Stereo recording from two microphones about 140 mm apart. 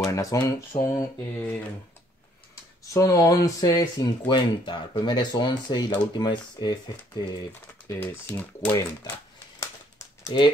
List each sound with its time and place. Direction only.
0.0 s speech: 25° left (ahead or behind)
2.9 s speech: 25° left (ahead or behind)
7.9 s speech: 15° left (ahead or behind)
9.6 s crumpling: 20° left (ahead or behind)